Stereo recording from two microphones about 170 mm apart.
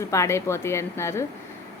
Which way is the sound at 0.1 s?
15° left (ahead or behind).